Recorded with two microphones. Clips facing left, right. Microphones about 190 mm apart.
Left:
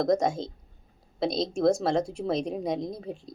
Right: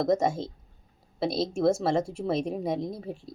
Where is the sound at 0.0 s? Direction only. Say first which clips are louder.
Even; 5° right (ahead or behind).